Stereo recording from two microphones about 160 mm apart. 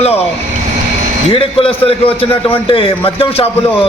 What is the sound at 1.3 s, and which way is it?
A man's voice, 35° left (ahead or behind).